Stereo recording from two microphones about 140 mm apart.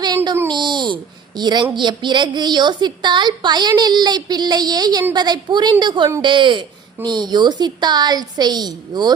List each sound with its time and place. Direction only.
0.5 s babbling: 35° right (ahead or behind)
1.4 s a woman's voice: 30° right (ahead or behind)